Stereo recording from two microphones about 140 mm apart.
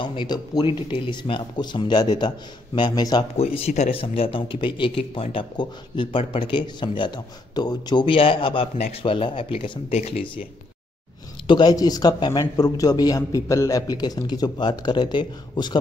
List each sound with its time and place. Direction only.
0.0 s speech: 35° left (ahead or behind)
3.5 s speech: 50° left (ahead or behind)
3.9 s speech: 40° left (ahead or behind)
11.4 s a man's voice: 30° left (ahead or behind)